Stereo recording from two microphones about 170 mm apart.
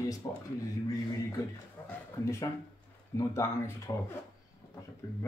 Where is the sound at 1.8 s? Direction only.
10° left (ahead or behind).